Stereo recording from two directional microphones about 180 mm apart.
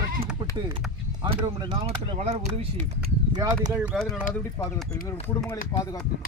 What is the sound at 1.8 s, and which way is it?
Speech, 35° right (ahead or behind).